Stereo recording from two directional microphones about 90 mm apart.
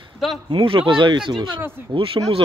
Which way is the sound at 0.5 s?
90° right.